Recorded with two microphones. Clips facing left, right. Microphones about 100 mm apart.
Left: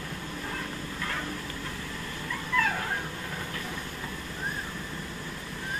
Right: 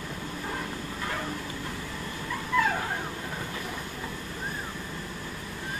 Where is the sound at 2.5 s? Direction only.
15° right (ahead or behind).